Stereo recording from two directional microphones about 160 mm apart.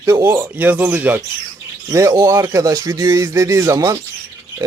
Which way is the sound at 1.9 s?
20° right (ahead or behind).